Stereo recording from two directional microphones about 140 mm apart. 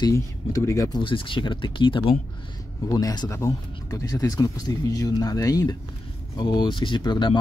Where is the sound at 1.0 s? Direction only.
35° left (ahead or behind).